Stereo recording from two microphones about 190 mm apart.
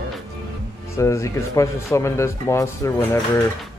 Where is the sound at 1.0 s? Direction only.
15° left (ahead or behind).